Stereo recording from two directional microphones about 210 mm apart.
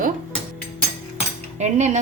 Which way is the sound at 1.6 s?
35° right (ahead or behind).